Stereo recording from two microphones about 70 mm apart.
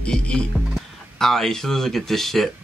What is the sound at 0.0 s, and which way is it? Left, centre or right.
Speech, centre.